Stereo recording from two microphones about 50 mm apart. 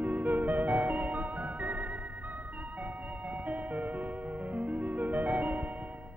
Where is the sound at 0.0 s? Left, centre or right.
Right.